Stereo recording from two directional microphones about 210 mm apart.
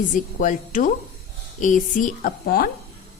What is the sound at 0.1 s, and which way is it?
A woman's voice, 40° left (ahead or behind).